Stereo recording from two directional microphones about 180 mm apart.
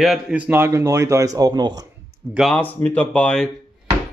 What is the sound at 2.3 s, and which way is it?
Speech, centre (ahead or behind).